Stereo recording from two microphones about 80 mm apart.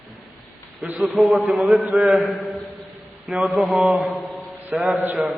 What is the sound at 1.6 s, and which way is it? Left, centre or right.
Mantra, centre.